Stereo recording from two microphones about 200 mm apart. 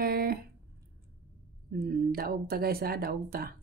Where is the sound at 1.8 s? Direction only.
50° right (ahead or behind).